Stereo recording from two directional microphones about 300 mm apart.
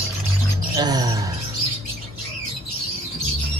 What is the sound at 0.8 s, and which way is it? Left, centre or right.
Chirp, centre.